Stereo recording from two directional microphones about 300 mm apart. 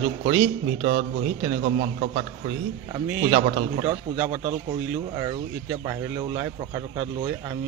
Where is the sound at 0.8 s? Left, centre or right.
Centre.